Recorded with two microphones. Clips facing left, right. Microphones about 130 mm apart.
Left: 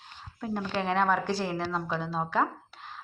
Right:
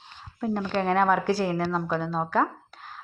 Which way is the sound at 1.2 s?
50° right (ahead or behind).